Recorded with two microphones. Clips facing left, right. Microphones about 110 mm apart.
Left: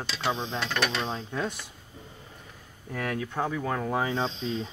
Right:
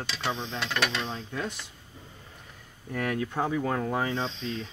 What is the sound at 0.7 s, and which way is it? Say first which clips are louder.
Speech: even; 5° left (ahead or behind).